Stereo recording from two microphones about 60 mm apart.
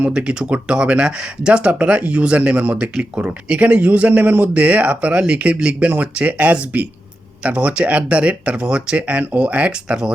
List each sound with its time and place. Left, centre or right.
0.1 s speech: centre